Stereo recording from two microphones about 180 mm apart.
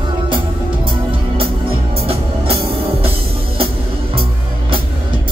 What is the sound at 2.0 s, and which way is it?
Music, 35° right (ahead or behind).